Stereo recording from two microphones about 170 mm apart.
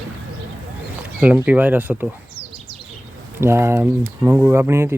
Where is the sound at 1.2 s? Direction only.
10° right (ahead or behind).